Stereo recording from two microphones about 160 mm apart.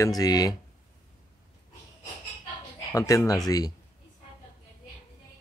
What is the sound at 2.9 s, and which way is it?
Speech, 20° left (ahead or behind).